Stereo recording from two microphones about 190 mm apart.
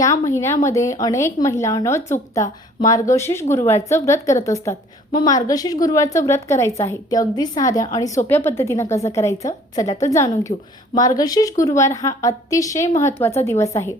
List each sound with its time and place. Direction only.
0.0 s a woman's voice: 15° left (ahead or behind)